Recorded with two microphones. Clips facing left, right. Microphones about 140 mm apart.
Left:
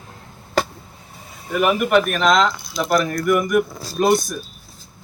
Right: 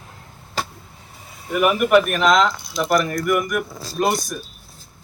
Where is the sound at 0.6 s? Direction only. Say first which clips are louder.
Left 7 dB; 55° left (ahead or behind).